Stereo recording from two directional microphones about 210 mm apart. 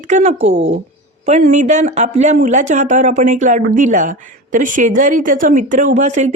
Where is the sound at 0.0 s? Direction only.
35° right (ahead or behind).